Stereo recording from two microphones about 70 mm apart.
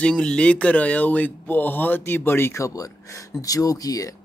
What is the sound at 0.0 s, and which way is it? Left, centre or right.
Speech, centre.